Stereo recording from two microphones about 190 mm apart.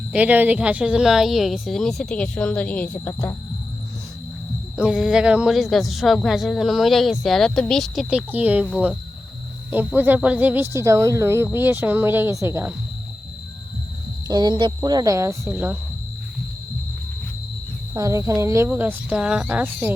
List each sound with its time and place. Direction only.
0.1 s speech: 5° right (ahead or behind); by 3.3 s 10° left (ahead or behind)
4.8 s speech: 5° right (ahead or behind)
9.6 s speech: 10° right (ahead or behind)
14.3 s speech: 20° right (ahead or behind)
17.9 s speech: 15° right (ahead or behind)